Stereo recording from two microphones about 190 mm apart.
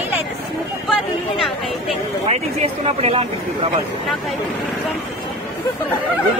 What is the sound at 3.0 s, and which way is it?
Speech, 30° right (ahead or behind).